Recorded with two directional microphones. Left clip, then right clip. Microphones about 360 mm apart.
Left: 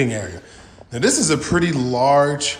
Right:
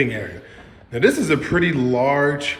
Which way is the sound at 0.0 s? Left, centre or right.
Centre.